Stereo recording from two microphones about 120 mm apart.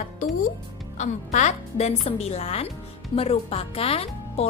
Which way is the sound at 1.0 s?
85° left.